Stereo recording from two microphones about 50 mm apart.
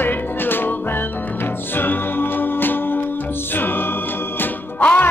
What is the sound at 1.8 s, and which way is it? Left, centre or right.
Music, left.